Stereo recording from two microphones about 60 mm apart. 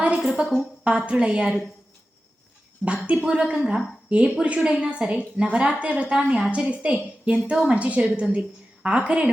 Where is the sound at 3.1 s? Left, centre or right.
Centre.